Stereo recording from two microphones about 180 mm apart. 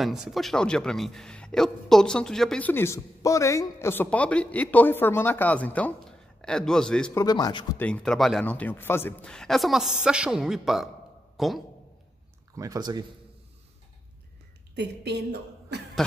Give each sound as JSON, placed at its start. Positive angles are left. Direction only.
{"t": 0.0, "sound": "speech", "side_deg": 0}
{"t": 7.2, "sound": "speech", "side_deg": 20}
{"t": 7.8, "sound": "speech", "side_deg": 5}
{"t": 12.5, "sound": "speech", "side_deg": -20}
{"t": 14.8, "sound": "speech", "side_deg": -70}